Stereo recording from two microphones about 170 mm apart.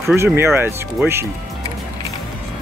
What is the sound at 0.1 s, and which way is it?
Speech, 15° right (ahead or behind).